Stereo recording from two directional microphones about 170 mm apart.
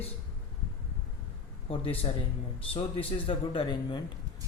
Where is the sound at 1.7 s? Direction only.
35° left (ahead or behind).